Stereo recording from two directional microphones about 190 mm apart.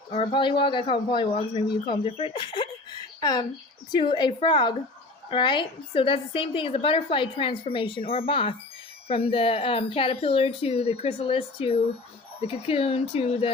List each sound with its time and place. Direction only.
0.1 s speech: 30° left (ahead or behind)